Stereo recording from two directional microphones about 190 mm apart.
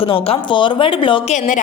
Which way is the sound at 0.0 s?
30° left (ahead or behind).